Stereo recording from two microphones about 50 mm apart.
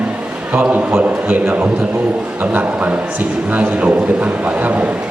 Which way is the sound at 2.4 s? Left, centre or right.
Right.